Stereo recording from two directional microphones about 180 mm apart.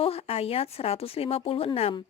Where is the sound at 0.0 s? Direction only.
35° left (ahead or behind).